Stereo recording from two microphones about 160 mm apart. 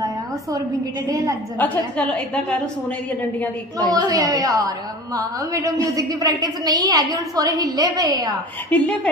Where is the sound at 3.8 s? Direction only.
25° right (ahead or behind).